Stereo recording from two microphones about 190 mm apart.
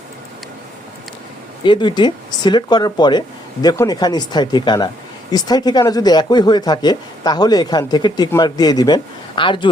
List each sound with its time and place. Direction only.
1.6 s speech: 25° left (ahead or behind)